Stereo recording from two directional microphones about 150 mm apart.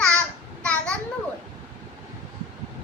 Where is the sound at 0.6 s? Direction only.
5° left (ahead or behind).